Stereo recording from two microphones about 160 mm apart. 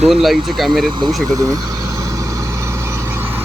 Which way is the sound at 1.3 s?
20° right (ahead or behind).